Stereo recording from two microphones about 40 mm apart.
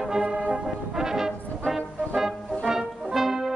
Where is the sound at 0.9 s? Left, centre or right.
Centre.